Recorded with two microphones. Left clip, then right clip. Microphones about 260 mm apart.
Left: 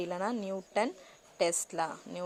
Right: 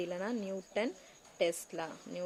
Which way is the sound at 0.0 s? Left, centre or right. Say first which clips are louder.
Left 3 dB; centre.